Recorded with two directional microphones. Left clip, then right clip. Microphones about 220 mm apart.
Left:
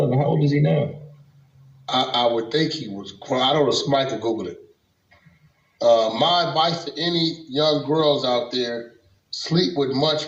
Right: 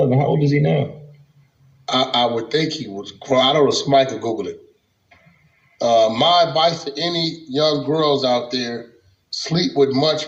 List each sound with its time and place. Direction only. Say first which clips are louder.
0.0 s a sound: right 3 dB; 50° right (ahead or behind)
1.8 s a man's voice: right 2 dB; 50° right (ahead or behind)
5.7 s a man's voice: right 2 dB; 50° right (ahead or behind)